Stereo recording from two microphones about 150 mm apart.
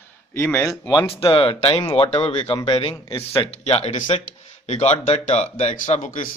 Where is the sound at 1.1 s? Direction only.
40° left (ahead or behind).